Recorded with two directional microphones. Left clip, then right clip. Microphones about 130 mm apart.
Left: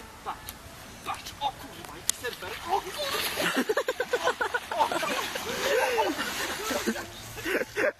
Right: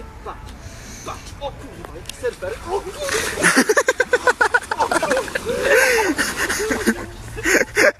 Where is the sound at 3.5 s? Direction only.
10° right (ahead or behind).